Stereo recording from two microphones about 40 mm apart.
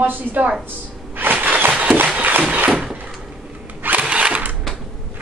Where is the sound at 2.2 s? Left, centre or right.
Right.